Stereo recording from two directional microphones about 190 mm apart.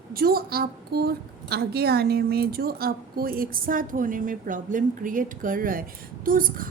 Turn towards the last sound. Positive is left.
turn(degrees=-45)  # may be behind; listen again after turning